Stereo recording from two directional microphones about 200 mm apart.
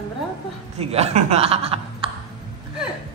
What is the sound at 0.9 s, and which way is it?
Speech, 30° right (ahead or behind).